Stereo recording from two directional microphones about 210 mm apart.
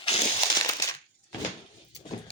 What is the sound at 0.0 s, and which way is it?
Crushing, 30° left (ahead or behind).